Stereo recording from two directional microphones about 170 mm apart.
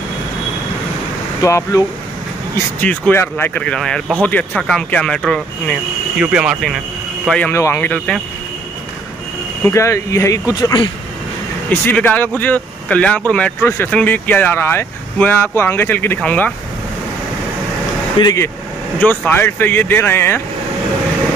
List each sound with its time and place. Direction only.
1.4 s speech: 20° left (ahead or behind)
2.5 s speech: 10° left (ahead or behind)
6.2 s speech: 5° right (ahead or behind); by 8.2 s 10° left (ahead or behind)
9.6 s speech: 15° left (ahead or behind)
11.7 s speech: 10° left (ahead or behind)
18.2 s speech: 20° left (ahead or behind)